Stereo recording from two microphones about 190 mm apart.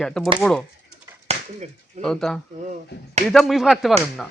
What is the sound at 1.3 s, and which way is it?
Chop, 35° right (ahead or behind).